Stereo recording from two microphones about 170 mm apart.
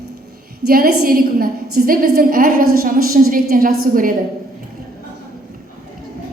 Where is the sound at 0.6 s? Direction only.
65° right (ahead or behind).